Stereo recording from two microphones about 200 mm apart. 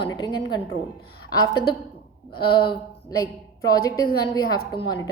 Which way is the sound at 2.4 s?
25° left (ahead or behind).